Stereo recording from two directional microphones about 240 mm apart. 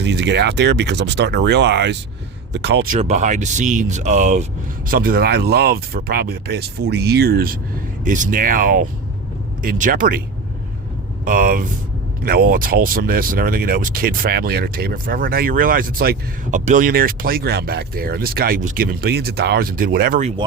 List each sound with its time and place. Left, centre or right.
0.0 s speech: right
3.0 s speech: right
11.3 s speech: right